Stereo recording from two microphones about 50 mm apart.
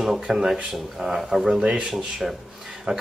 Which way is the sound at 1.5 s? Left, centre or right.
Centre.